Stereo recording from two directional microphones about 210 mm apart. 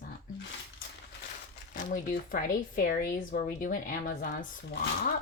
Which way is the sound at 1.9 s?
40° left (ahead or behind).